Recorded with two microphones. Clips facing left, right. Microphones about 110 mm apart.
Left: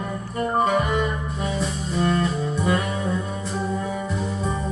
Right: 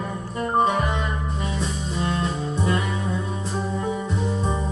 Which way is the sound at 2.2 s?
Centre (ahead or behind).